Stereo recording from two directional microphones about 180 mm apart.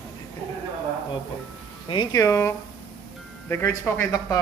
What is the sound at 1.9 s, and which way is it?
Speech, 25° left (ahead or behind).